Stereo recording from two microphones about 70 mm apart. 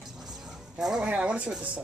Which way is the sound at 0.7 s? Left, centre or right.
Centre.